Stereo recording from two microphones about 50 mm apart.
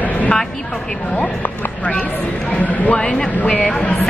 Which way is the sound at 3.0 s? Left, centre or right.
Centre.